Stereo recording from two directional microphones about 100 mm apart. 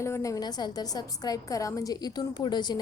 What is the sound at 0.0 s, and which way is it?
A woman's voice, 30° left (ahead or behind).